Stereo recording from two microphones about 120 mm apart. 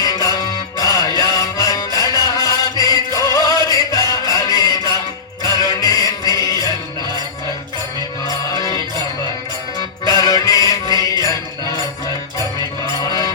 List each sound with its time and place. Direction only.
0.0 s music: 30° left (ahead or behind)
2.2 s music: 35° right (ahead or behind)
2.9 s music: 30° left (ahead or behind)
8.3 s music: 30° left (ahead or behind)
10.1 s mantra: 30° left (ahead or behind)
13.0 s a sound: 30° left (ahead or behind)